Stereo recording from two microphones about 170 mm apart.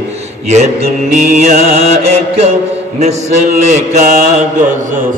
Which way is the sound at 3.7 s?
45° right (ahead or behind).